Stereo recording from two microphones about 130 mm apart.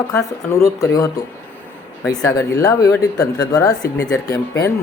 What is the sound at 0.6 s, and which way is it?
Speech, 25° left (ahead or behind).